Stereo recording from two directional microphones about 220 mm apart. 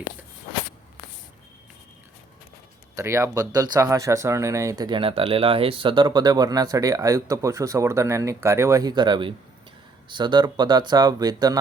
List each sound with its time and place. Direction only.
2.9 s speech: 15° right (ahead or behind)